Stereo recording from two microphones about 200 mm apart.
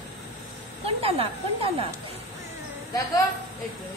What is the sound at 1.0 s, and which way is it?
Speech, 30° right (ahead or behind).